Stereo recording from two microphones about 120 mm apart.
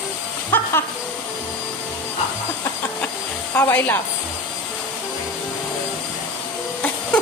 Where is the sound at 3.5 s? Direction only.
15° left (ahead or behind).